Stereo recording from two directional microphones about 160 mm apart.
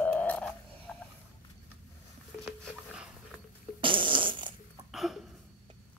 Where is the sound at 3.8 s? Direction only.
30° right (ahead or behind).